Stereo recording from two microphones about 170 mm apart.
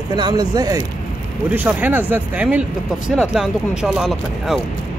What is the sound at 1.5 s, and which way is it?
Speech, 10° right (ahead or behind).